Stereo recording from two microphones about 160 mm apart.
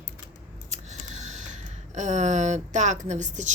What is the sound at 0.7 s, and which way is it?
Scissors, 45° right (ahead or behind).